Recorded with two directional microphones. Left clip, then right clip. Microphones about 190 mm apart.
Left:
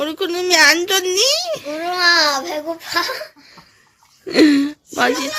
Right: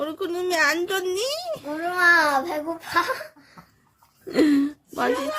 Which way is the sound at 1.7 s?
40° right (ahead or behind).